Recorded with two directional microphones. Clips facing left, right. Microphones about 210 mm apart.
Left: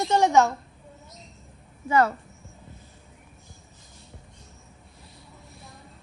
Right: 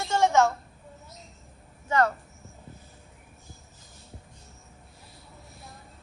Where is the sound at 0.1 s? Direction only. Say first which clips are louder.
Left 2 dB; 15° left (ahead or behind).